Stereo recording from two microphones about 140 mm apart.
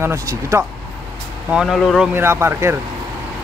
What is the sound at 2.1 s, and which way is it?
Speech, 15° right (ahead or behind).